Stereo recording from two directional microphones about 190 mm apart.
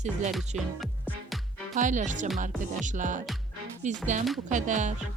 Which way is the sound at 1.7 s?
40° right (ahead or behind).